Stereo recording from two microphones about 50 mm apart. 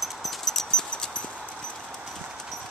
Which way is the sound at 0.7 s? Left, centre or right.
Centre.